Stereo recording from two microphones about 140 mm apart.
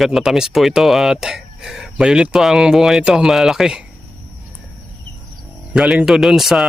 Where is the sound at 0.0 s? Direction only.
Centre (ahead or behind).